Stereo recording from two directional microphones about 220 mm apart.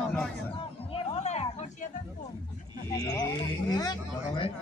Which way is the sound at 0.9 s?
30° left (ahead or behind).